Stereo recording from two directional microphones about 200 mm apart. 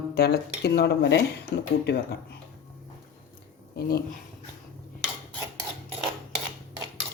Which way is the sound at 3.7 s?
50° left (ahead or behind).